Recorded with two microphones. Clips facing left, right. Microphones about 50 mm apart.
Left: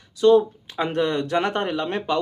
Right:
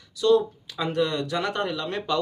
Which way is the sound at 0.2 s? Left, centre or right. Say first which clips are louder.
Left 4 dB; left.